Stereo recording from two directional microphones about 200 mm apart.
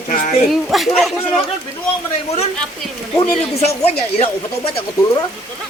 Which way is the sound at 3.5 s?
30° left (ahead or behind).